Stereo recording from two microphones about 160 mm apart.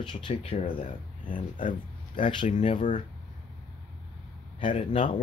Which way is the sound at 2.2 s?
30° left (ahead or behind).